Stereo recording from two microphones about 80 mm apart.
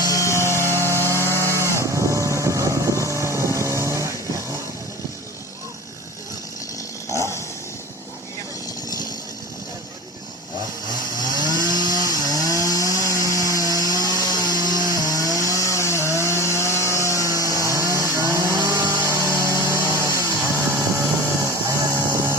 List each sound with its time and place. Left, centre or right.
0.1 s a sound: left
0.3 s chainsaw: right
7.1 s dog: left
11.5 s chainsaw: right
18.7 s a sound: right
19.0 s chainsaw: right
22.1 s vehicle: right